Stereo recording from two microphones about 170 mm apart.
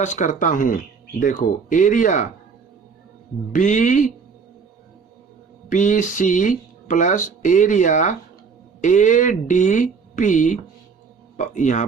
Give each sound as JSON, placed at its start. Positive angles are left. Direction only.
{"t": 0.0, "sound": "speech", "side_deg": 45}
{"t": 3.5, "sound": "speech", "side_deg": 50}
{"t": 5.6, "sound": "speech", "side_deg": 50}